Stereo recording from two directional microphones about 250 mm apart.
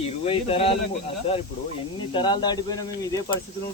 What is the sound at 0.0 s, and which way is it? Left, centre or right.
Speech, left.